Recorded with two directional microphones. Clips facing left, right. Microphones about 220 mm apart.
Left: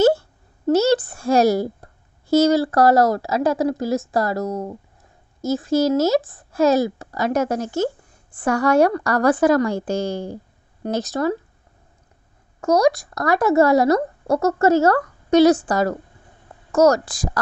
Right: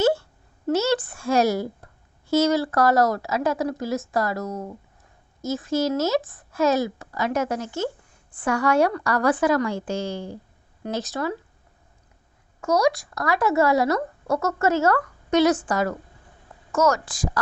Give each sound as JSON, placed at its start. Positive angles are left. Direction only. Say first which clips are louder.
{"t": 0.0, "sound": "a sound", "louder": "left 5 dB", "side_deg": 40}
{"t": 2.3, "sound": "speech", "louder": "left 4 dB", "side_deg": 35}
{"t": 12.5, "sound": "speech", "louder": "left 4 dB", "side_deg": 40}